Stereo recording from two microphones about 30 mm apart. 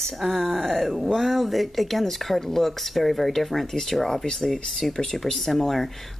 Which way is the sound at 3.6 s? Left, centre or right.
Centre.